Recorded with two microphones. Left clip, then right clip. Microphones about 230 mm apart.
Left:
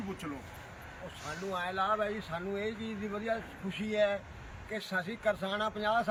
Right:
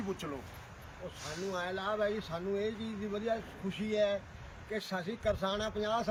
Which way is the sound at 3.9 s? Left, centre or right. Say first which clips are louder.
Left 1 dB; centre.